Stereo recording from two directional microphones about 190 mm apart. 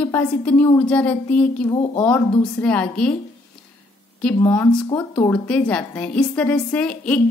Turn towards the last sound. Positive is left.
turn(degrees=5)  # may be behind; listen again after turning